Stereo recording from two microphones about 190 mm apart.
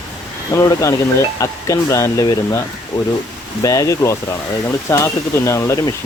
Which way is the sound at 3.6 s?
15° left (ahead or behind).